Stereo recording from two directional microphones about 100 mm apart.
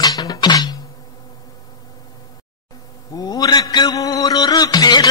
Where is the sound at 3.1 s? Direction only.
40° left (ahead or behind).